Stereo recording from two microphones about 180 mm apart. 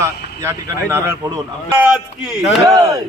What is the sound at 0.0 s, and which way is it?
Speech, 15° right (ahead or behind).